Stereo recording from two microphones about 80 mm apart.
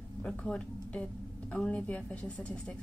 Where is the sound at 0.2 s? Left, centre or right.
Centre.